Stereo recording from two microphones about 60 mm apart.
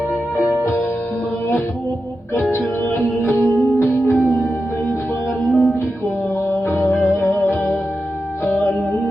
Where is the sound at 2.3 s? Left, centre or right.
Left.